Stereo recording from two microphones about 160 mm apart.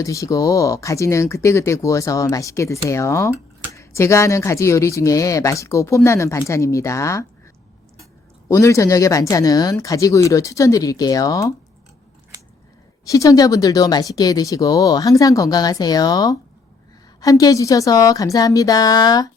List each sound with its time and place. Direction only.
0.0 s speech: 20° left (ahead or behind)
8.4 s speech: 20° left (ahead or behind)
13.1 s speech: 20° left (ahead or behind)